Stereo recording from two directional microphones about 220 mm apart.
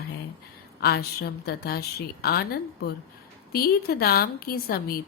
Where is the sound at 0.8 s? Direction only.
45° left (ahead or behind).